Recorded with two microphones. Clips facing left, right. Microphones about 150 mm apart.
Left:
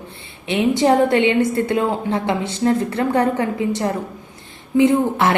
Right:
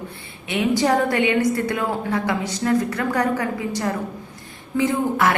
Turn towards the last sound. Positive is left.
turn(degrees=25)  # may be behind; listen again after turning